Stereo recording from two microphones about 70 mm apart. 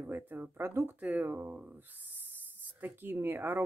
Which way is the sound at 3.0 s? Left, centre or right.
Right.